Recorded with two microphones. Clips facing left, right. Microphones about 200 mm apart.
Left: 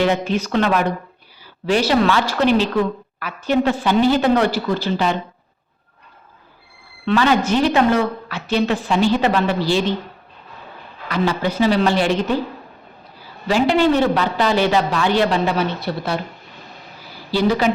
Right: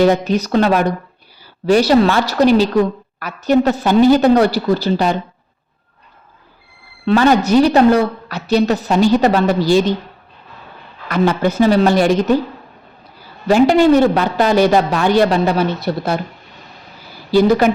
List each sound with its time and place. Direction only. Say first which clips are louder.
0.0 s a woman's voice: right 5 dB; 40° right (ahead or behind)
7.0 s a woman's voice: right 4 dB; 40° right (ahead or behind)
11.1 s a man's voice: right 5 dB; 50° right (ahead or behind)
13.5 s a man's voice: right 5 dB; 45° right (ahead or behind)
17.3 s a man's voice: right 6 dB; 50° right (ahead or behind)